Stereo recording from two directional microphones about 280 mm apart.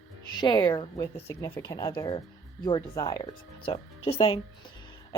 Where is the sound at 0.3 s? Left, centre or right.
Centre.